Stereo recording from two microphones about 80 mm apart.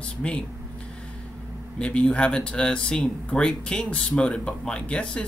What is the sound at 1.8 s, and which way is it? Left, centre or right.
Speech, centre.